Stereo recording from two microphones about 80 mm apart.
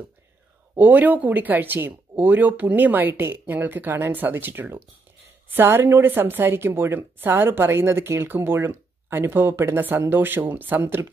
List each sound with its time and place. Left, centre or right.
0.7 s a woman's voice: right